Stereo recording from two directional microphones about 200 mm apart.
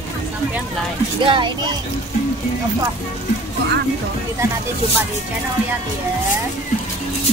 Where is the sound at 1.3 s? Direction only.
25° right (ahead or behind).